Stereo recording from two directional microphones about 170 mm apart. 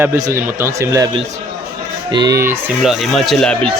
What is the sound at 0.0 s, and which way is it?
Speech, 20° right (ahead or behind).